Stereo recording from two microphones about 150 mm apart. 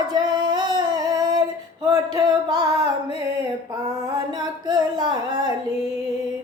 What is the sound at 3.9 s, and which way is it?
Singing, 25° right (ahead or behind).